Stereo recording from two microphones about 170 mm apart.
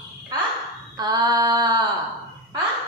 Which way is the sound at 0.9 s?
25° right (ahead or behind).